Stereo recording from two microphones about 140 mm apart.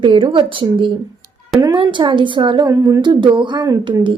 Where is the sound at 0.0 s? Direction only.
35° right (ahead or behind).